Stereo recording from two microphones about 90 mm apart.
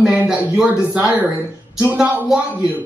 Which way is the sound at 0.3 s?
10° right (ahead or behind).